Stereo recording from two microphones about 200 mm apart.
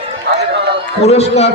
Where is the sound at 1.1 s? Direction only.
30° left (ahead or behind).